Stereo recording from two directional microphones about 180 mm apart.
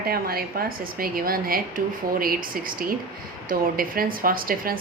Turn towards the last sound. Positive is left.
turn(degrees=-55)  # may be behind; listen again after turning